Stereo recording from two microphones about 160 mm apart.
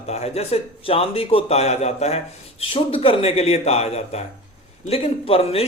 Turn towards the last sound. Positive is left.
turn(degrees=40)  # may be behind; listen again after turning